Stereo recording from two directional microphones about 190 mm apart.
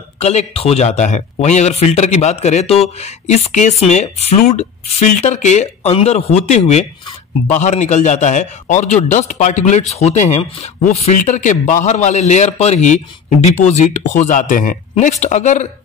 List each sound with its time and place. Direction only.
0.2 s speech: 35° left (ahead or behind)